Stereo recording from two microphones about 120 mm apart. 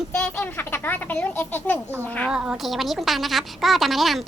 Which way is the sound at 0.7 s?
15° left (ahead or behind).